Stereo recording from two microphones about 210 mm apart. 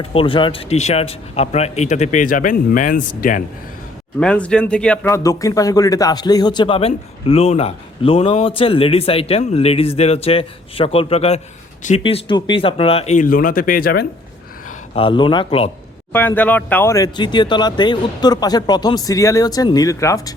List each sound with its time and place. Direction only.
0.0 s a man's voice: 25° left (ahead or behind)
4.2 s a man's voice: 5° left (ahead or behind); by 14.1 s 45° left (ahead or behind)
14.9 s speech: 25° left (ahead or behind)
16.1 s speech: 10° left (ahead or behind)